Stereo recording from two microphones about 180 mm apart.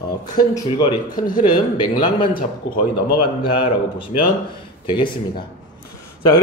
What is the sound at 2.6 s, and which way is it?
Speech, 70° left (ahead or behind).